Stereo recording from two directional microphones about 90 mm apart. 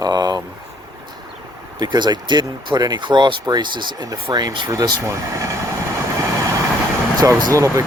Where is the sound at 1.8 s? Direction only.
50° right (ahead or behind); by 5.6 s 35° right (ahead or behind).